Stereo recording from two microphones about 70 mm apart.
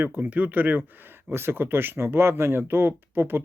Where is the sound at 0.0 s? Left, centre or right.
Right.